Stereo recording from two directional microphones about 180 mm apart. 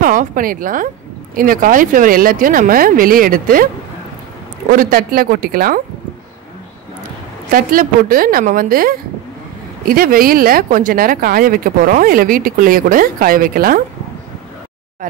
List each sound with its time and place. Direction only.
0.0 s a woman's voice: 50° right (ahead or behind)
4.7 s speech: 55° right (ahead or behind)
7.5 s speech: 50° right (ahead or behind)